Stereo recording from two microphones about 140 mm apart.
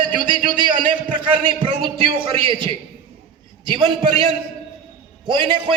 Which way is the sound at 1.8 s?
35° right (ahead or behind).